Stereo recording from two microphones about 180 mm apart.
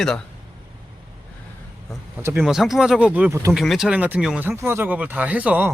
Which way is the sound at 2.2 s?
5° right (ahead or behind).